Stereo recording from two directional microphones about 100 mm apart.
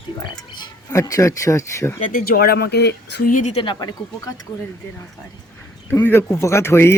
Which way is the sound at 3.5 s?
70° left (ahead or behind).